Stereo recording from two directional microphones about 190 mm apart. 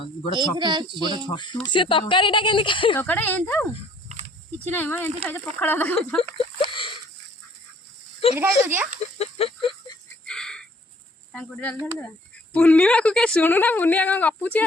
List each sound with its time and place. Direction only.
0.6 s speech: 20° right (ahead or behind)
1.3 s speech: 25° left (ahead or behind)
3.0 s speech: 10° left (ahead or behind)
4.7 s speech: 10° left (ahead or behind)
6.1 s a sound: 30° left (ahead or behind)
8.4 s speech: 10° right (ahead or behind)
9.1 s a sound: 30° left (ahead or behind)
10.2 s a sound: 5° left (ahead or behind)
11.3 s speech: 5° left (ahead or behind)